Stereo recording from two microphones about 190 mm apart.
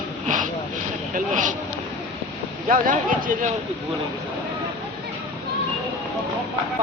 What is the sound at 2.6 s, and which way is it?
Speech, 45° right (ahead or behind).